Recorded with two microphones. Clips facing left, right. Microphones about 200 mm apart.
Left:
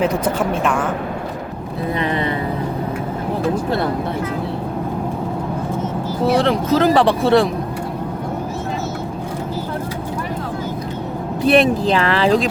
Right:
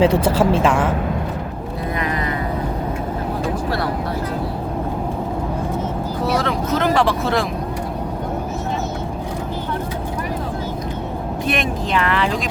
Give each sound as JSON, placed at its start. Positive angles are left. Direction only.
{"t": 0.0, "sound": "speech", "side_deg": -30}
{"t": 2.0, "sound": "vehicle", "side_deg": 30}
{"t": 6.2, "sound": "speech", "side_deg": 30}
{"t": 11.4, "sound": "speech", "side_deg": 35}